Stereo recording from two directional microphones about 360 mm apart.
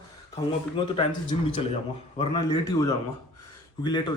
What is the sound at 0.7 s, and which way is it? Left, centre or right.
A man's voice, centre.